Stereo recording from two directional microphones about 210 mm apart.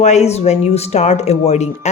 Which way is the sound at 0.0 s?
35° left (ahead or behind).